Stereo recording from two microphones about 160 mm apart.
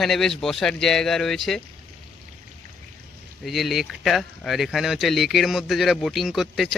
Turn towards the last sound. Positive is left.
turn(degrees=0)  # may be behind; listen again after turning